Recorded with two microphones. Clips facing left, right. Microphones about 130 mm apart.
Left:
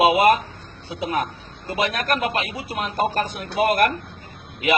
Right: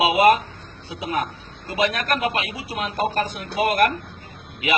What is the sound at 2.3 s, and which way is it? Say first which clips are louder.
Speech: left 1 dB; 50° left (ahead or behind).